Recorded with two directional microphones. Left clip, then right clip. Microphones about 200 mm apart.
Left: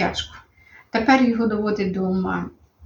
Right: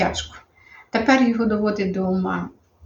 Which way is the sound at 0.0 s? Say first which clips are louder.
Right 1 dB; 5° right (ahead or behind).